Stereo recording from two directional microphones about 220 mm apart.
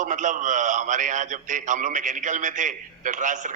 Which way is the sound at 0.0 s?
35° right (ahead or behind).